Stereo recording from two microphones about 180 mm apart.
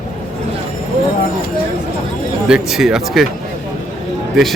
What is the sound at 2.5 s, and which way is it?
Speech, 5° right (ahead or behind).